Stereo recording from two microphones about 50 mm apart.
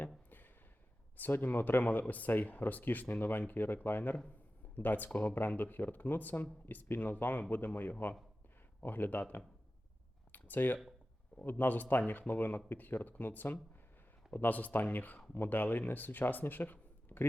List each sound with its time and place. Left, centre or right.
1.1 s speech: left
10.3 s a sound: left
11.4 s speech: left